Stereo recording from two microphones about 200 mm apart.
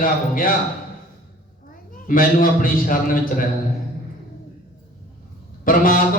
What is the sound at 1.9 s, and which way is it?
Speech, 45° left (ahead or behind).